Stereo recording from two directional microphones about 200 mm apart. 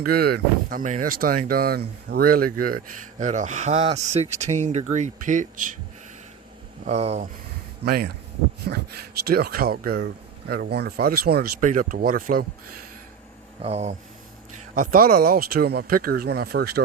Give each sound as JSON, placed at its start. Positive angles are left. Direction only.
{"t": 0.0, "sound": "speech", "side_deg": -50}
{"t": 6.8, "sound": "speech", "side_deg": -30}
{"t": 7.9, "sound": "speech", "side_deg": -50}
{"t": 13.6, "sound": "speech", "side_deg": -30}
{"t": 14.8, "sound": "speech", "side_deg": -45}